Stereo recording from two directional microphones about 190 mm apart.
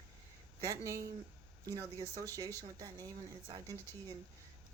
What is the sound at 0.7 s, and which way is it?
A woman's voice, 15° right (ahead or behind).